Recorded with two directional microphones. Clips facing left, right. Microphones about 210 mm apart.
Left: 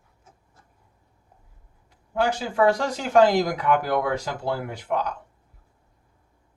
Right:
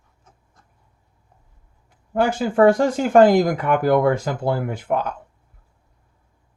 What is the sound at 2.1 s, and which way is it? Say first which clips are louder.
Speech: right 5 dB; 50° right (ahead or behind).